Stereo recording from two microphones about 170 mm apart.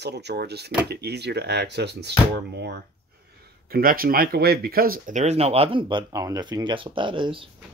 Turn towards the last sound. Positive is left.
turn(degrees=-30)  # may be behind; listen again after turning